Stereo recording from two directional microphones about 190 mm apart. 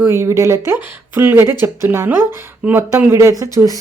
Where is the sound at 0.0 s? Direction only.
15° right (ahead or behind).